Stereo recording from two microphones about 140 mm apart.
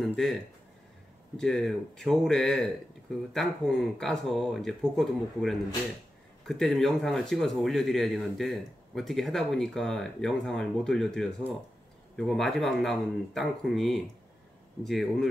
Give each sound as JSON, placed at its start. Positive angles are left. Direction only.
{"t": 0.0, "sound": "speech", "side_deg": 0}